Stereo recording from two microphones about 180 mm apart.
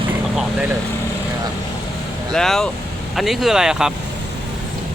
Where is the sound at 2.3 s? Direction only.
5° left (ahead or behind).